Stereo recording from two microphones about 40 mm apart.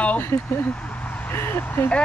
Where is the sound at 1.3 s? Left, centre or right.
Left.